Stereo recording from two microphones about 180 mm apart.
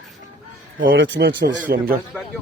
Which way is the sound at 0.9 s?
80° right.